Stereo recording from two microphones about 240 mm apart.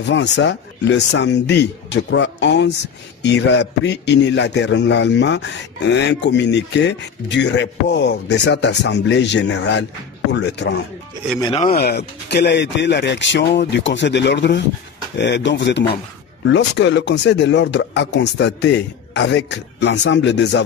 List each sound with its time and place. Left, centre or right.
0.0 s a man's voice: left
11.3 s speech: centre
11.7 s a man's voice: left